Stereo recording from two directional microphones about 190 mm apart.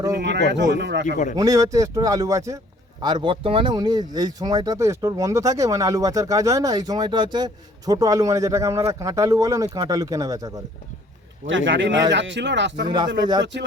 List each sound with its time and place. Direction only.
0.2 s speech: 65° right (ahead or behind)
1.4 s speech: 15° right (ahead or behind)
11.4 s speech: 80° right
13.1 s speech: 25° right (ahead or behind)
13.4 s speech: 65° right (ahead or behind)